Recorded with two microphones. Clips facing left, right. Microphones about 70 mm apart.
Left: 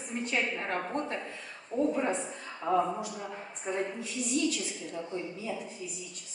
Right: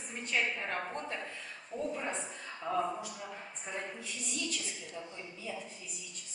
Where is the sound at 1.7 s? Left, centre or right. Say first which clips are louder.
Left 9 dB; left.